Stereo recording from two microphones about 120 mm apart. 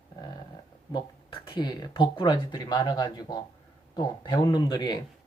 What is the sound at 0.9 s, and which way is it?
Speech, 45° left (ahead or behind).